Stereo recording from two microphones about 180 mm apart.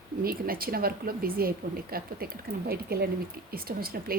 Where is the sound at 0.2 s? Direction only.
55° right (ahead or behind).